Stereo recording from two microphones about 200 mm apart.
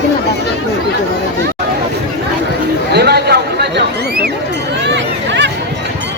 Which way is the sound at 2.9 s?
55° right (ahead or behind).